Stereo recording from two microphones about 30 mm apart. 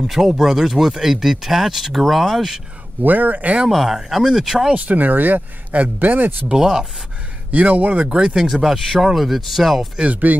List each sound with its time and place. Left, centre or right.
0.0 s speech: centre
3.0 s speech: right
3.6 s speech: centre
4.7 s speech: right
6.5 s speech: right
7.5 s speech: right
8.1 s speech: right
8.6 s speech: right
9.1 s speech: centre